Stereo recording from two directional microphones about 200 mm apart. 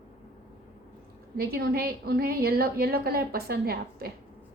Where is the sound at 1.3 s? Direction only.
50° right (ahead or behind).